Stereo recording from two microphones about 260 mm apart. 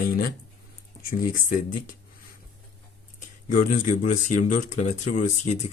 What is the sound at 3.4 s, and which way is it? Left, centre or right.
Speech, left.